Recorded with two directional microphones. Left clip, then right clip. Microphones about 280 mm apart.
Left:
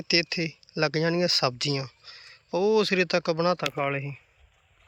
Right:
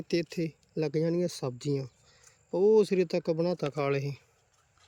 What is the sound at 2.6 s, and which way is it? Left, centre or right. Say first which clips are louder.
Speech: left 1 dB; centre.